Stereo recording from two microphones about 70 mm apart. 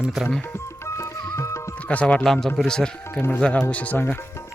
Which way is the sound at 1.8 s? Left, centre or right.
Centre.